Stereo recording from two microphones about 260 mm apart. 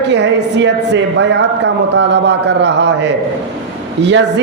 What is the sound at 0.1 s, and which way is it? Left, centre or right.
A man's voice, right.